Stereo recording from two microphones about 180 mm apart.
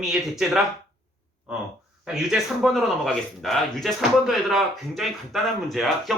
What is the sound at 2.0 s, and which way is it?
Speech, 5° right (ahead or behind).